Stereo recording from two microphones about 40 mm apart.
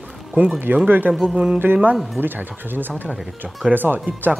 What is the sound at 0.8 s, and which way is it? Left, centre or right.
Speech, right.